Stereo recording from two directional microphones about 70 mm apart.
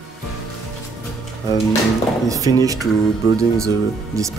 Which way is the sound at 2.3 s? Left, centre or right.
Right.